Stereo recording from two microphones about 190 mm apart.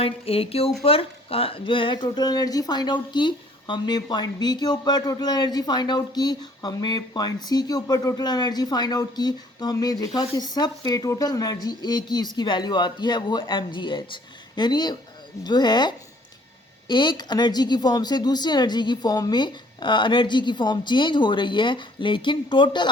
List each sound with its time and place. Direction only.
0.0 s speech: 30° left (ahead or behind)